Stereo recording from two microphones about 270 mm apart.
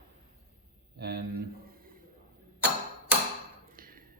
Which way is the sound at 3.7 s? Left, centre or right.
Right.